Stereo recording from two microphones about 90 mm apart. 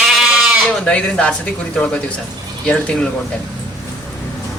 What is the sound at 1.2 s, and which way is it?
A man's voice, 15° left (ahead or behind).